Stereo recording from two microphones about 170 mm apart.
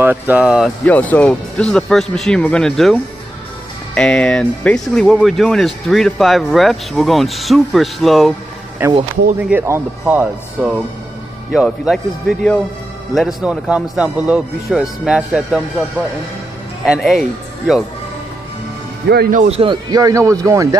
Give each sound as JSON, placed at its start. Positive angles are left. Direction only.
{"t": 0.0, "sound": "speech", "side_deg": -10}
{"t": 0.8, "sound": "speech", "side_deg": 10}
{"t": 8.8, "sound": "speech", "side_deg": -15}
{"t": 16.8, "sound": "speech", "side_deg": 0}
{"t": 19.3, "sound": "a man's voice", "side_deg": -40}